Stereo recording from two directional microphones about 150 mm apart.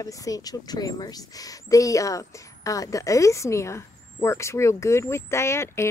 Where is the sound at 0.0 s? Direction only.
25° left (ahead or behind).